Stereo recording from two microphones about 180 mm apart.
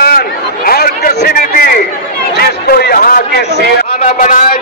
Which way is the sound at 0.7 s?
55° left (ahead or behind).